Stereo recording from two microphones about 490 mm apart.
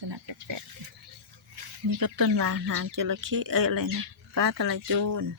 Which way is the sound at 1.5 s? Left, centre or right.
Right.